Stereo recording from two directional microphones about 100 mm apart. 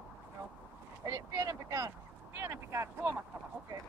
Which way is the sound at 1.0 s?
35° right (ahead or behind).